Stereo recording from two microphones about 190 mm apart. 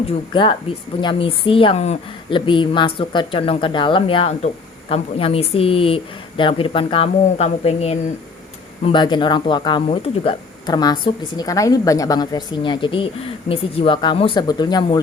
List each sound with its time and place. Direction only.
0.0 s speech: 25° left (ahead or behind)